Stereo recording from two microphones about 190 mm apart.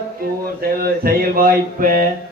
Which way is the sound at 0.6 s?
50° right (ahead or behind).